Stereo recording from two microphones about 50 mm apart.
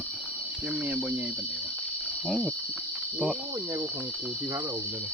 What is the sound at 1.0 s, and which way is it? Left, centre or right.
Speech, right.